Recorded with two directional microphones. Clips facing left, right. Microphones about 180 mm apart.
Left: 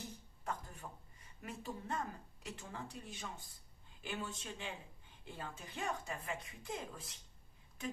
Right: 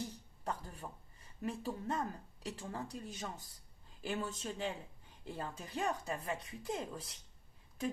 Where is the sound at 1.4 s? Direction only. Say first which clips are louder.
Right 6 dB; 35° right (ahead or behind).